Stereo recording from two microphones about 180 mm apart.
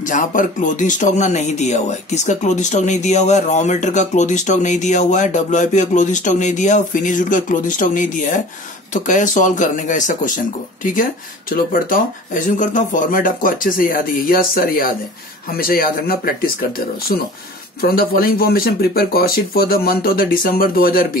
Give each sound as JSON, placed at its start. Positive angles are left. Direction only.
{"t": 0.1, "sound": "speech", "side_deg": 45}
{"t": 17.8, "sound": "a man's voice", "side_deg": 55}